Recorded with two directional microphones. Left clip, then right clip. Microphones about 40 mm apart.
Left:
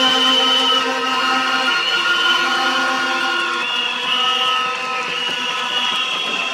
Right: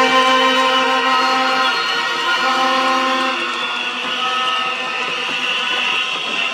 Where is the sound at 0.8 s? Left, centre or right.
Right.